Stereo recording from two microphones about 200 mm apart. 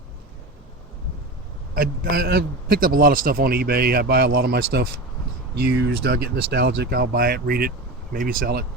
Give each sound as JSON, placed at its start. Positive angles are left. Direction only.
{"t": 1.7, "sound": "a man's voice", "side_deg": -45}